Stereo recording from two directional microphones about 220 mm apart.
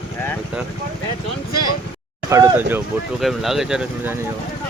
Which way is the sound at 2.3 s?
10° right (ahead or behind).